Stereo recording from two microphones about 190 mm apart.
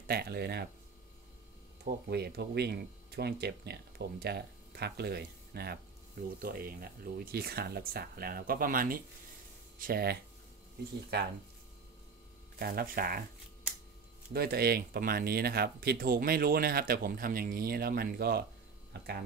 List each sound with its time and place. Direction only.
0.0 s speech: 55° right (ahead or behind)
2.0 s speech: 60° right (ahead or behind)
12.5 s speech: 50° right (ahead or behind)
14.3 s speech: 55° right (ahead or behind)